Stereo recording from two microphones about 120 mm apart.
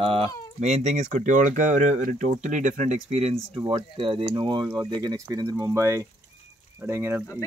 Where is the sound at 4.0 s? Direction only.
45° right (ahead or behind); by 7.2 s 20° right (ahead or behind).